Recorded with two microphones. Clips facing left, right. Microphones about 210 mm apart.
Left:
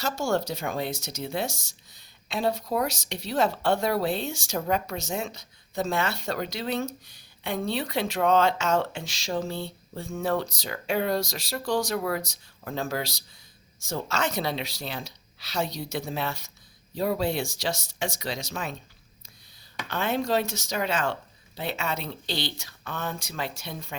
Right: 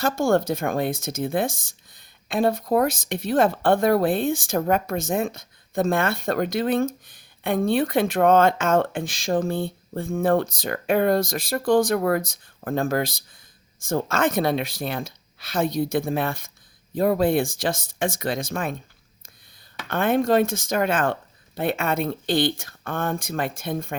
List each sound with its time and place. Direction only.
0.0 s speech: 55° right (ahead or behind)
19.9 s speech: 55° right (ahead or behind)